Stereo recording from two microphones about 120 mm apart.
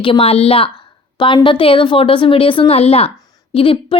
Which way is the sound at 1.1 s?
40° left (ahead or behind).